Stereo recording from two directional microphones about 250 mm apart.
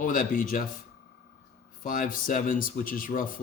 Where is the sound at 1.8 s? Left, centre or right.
Left.